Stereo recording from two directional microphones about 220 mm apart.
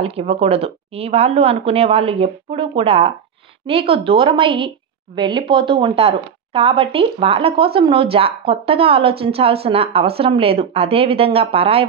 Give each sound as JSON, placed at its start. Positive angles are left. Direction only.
{"t": 0.0, "sound": "speech", "side_deg": -25}